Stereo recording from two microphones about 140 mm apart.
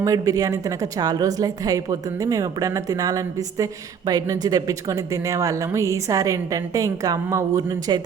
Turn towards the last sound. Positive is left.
turn(degrees=-25)  # may be behind; listen again after turning